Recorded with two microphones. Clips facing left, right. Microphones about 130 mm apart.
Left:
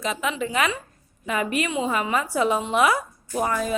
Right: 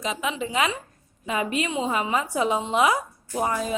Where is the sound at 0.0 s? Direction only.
15° right (ahead or behind).